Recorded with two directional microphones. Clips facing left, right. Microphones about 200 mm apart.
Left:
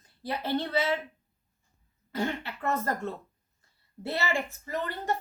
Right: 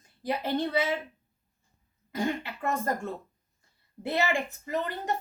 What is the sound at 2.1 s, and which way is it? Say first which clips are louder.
Speech: right 1 dB; 15° right (ahead or behind).